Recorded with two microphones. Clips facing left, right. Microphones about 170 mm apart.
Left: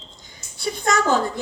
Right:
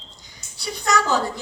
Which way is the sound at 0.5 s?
50° left (ahead or behind).